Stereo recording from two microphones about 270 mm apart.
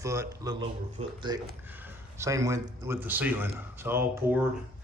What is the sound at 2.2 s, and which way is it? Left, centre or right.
Speech, centre.